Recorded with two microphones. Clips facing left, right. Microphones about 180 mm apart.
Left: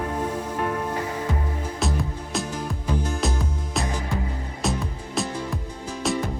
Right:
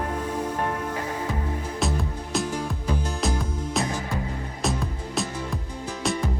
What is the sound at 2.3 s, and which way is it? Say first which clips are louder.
Music: right 2 dB; centre (ahead or behind).